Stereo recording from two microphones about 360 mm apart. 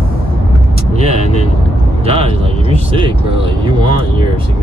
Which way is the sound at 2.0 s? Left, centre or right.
Centre.